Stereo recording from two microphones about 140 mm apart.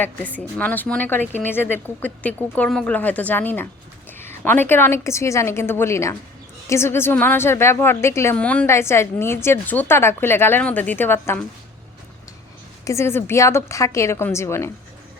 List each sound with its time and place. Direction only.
0.0 s a woman's voice: 10° left (ahead or behind)
8.4 s a woman's voice: 10° left (ahead or behind)
8.6 s a woman's voice: 20° left (ahead or behind)
12.8 s a woman's voice: 20° left (ahead or behind)